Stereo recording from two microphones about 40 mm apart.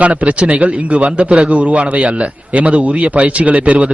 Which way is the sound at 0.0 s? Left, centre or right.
Right.